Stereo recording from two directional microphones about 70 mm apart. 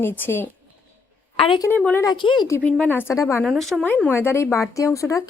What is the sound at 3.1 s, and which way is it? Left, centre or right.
Speech, left.